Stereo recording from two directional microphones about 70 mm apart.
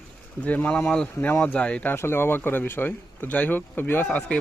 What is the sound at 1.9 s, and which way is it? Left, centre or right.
Speech, left.